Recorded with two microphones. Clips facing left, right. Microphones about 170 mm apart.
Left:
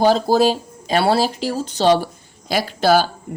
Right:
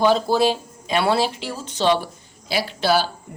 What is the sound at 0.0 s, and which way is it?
Speech, 40° left (ahead or behind).